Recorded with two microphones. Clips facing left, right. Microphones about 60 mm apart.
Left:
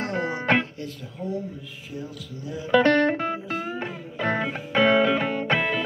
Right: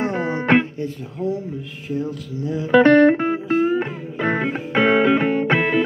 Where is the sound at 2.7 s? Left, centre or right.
Right.